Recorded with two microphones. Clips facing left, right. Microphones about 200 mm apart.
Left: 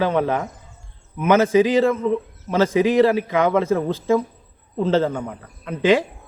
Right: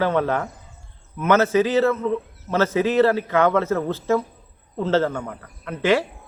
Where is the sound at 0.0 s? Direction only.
15° left (ahead or behind).